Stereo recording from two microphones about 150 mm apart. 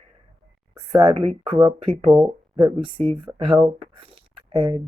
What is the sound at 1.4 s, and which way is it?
Speech, 25° right (ahead or behind).